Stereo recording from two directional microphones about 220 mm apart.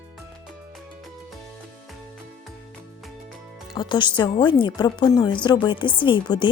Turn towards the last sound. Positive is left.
turn(degrees=20)  # may be behind; listen again after turning